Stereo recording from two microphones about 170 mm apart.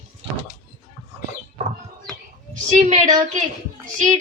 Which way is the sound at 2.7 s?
45° right (ahead or behind).